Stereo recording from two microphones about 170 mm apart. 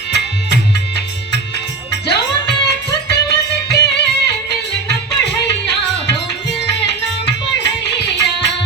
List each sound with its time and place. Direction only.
0.1 s music: 80° left